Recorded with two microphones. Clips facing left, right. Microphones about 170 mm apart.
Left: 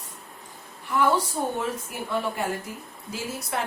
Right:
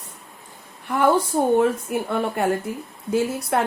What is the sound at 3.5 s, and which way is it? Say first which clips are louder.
Speech: right 8 dB; 55° right (ahead or behind).